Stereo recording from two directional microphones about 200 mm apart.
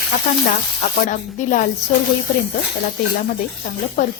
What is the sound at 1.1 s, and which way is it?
Speech, 40° left (ahead or behind).